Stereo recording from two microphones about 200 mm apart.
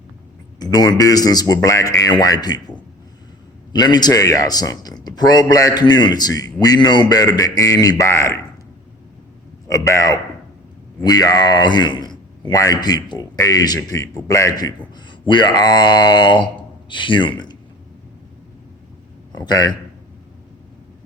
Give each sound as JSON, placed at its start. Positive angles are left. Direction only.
{"t": 0.6, "sound": "a man's voice", "side_deg": 20}
{"t": 9.6, "sound": "a man's voice", "side_deg": 15}
{"t": 19.4, "sound": "a man's voice", "side_deg": 20}